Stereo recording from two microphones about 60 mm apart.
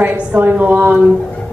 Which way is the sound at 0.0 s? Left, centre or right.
Right.